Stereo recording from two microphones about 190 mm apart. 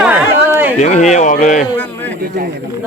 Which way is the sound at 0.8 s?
35° left (ahead or behind).